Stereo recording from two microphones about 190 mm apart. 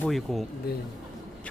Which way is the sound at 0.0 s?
Centre (ahead or behind).